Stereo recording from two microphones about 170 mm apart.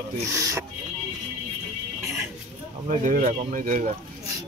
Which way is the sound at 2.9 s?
50° right (ahead or behind).